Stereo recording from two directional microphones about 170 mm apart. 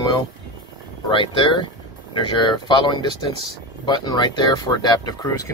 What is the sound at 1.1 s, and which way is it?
Speech, 30° left (ahead or behind).